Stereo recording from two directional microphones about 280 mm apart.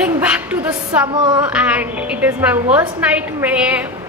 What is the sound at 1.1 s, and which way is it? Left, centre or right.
Speech, centre.